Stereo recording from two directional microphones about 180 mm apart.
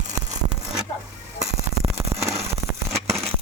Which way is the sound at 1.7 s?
35° right (ahead or behind).